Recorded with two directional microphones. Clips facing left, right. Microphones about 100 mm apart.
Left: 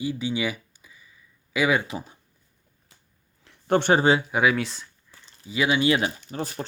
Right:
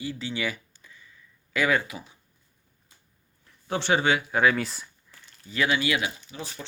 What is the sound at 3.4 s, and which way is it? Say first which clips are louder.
Speech: left 6 dB; 55° left (ahead or behind).